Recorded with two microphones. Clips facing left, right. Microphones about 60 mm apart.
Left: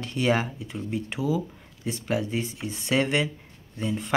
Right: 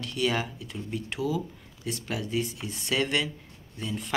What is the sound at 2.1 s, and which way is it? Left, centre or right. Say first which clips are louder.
Speech: left 3 dB; left.